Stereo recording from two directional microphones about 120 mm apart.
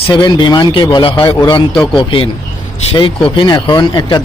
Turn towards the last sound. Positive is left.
turn(degrees=40)  # may be behind; listen again after turning